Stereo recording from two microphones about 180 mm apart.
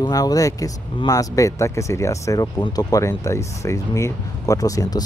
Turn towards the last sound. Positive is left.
turn(degrees=20)  # may be behind; listen again after turning